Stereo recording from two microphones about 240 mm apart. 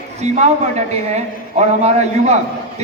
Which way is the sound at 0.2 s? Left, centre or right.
Right.